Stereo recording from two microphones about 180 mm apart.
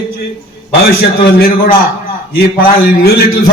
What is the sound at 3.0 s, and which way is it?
Speech, 60° left (ahead or behind).